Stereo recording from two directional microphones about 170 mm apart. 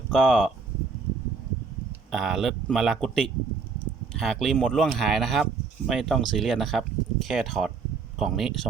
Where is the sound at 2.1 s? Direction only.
5° right (ahead or behind).